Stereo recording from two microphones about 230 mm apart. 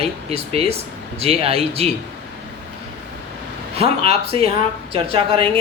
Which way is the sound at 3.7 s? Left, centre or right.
Right.